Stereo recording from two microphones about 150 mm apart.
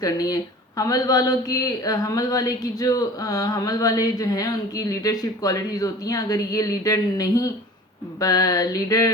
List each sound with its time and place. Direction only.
0.0 s speech: 25° left (ahead or behind)